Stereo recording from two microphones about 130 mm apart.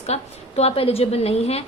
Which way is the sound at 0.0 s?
55° left (ahead or behind).